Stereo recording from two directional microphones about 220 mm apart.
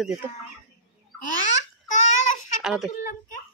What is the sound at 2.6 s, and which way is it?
Speech, centre (ahead or behind).